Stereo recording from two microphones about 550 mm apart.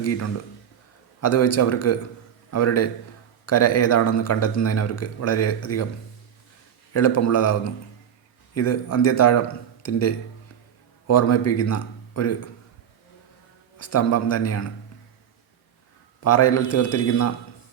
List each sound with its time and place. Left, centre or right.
0.0 s speech: left
6.9 s speech: left
8.5 s a man's voice: left
13.7 s speech: left
16.2 s speech: left